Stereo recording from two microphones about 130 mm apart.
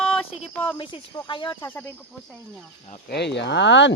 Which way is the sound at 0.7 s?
35° left (ahead or behind).